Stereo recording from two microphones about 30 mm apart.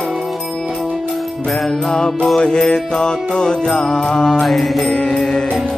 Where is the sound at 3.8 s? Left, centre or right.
Centre.